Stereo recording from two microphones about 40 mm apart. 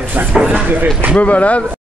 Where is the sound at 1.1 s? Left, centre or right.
Left.